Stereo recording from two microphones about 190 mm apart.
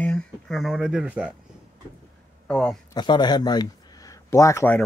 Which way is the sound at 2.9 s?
20° left (ahead or behind).